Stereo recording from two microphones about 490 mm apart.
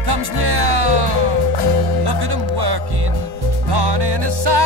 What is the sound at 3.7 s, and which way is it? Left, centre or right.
Music, right.